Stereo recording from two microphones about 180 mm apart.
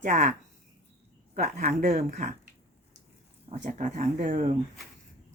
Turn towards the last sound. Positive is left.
turn(degrees=-40)  # may be behind; listen again after turning